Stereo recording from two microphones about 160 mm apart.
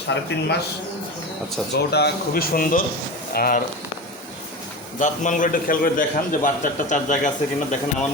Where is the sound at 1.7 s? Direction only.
90° left; by 3.6 s 65° left (ahead or behind).